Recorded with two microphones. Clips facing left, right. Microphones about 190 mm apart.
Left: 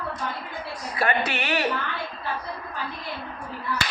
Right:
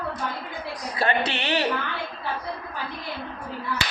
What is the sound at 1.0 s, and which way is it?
Speech, 30° right (ahead or behind).